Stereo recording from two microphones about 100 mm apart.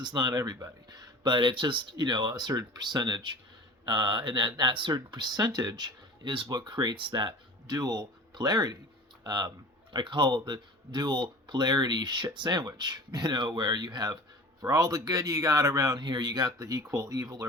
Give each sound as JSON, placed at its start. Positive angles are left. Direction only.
{"t": 0.0, "sound": "speech", "side_deg": -45}
{"t": 16.0, "sound": "speech", "side_deg": -50}